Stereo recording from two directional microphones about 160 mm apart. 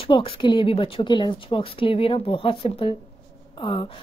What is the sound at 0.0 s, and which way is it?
A woman's voice, 35° left (ahead or behind).